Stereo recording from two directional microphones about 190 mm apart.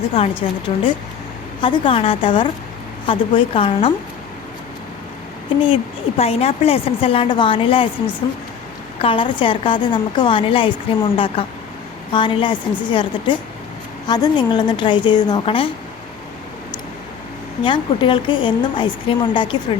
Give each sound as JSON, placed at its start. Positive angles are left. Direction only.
{"t": 0.1, "sound": "a woman's voice", "side_deg": 30}
{"t": 5.5, "sound": "a woman's voice", "side_deg": 30}
{"t": 9.0, "sound": "a woman's voice", "side_deg": 25}
{"t": 17.6, "sound": "a woman's voice", "side_deg": 25}